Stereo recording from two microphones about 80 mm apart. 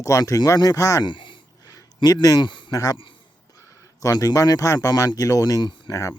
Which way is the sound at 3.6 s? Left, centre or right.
Left.